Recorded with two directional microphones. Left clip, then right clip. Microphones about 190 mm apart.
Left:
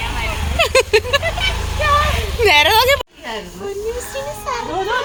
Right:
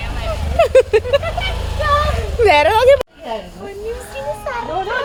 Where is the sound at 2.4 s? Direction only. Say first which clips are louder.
Right 1 dB; 40° right (ahead or behind).